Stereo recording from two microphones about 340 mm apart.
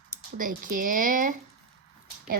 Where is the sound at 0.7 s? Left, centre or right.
Right.